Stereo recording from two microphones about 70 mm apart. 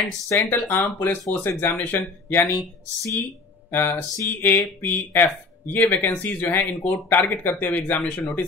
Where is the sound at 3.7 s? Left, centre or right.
Left.